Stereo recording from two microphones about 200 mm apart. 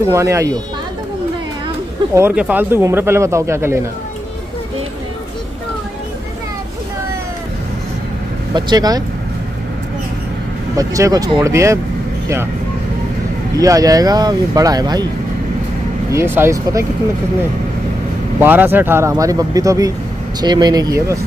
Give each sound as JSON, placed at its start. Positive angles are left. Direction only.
{"t": 0.1, "sound": "speech", "side_deg": -15}
{"t": 2.1, "sound": "speech", "side_deg": -10}
{"t": 8.5, "sound": "speech", "side_deg": -20}
{"t": 10.8, "sound": "speech", "side_deg": -15}
{"t": 13.6, "sound": "speech", "side_deg": -15}
{"t": 16.1, "sound": "speech", "side_deg": -10}
{"t": 18.4, "sound": "speech", "side_deg": -10}